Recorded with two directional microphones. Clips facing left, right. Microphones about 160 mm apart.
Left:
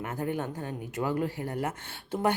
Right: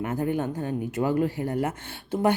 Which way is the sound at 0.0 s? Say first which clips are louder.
Right 5 dB; 20° right (ahead or behind).